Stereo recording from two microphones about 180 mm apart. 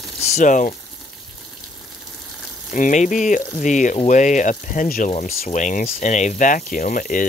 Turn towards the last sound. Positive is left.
turn(degrees=50)  # may be behind; listen again after turning